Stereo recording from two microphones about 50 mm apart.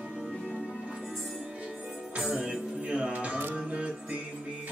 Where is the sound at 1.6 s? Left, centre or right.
Right.